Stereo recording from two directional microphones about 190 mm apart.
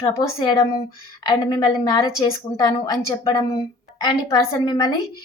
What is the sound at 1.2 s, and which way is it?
A woman's voice, 20° left (ahead or behind).